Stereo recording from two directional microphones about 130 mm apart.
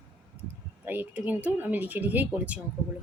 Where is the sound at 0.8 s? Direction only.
15° right (ahead or behind).